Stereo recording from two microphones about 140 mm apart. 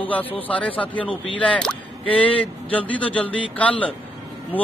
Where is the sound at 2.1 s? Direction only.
40° left (ahead or behind).